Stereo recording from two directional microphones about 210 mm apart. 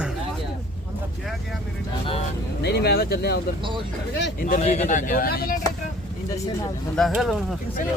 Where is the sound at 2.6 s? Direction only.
50° left (ahead or behind).